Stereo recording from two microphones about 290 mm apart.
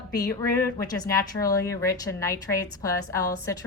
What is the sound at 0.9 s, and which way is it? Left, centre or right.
A woman's voice, centre.